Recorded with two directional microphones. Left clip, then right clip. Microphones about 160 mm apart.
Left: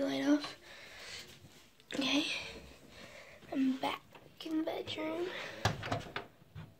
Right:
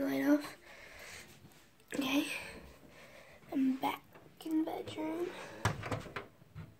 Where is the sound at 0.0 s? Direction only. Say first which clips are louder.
Even; 20° right (ahead or behind).